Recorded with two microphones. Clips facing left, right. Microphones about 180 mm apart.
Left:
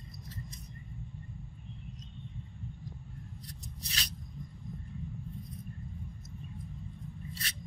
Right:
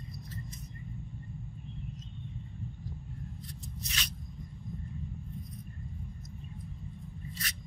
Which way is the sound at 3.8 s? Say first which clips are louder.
Right 1 dB; 35° left (ahead or behind).